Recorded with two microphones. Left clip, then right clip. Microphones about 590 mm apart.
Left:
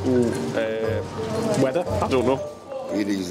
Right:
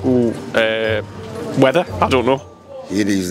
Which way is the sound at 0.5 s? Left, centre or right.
Right.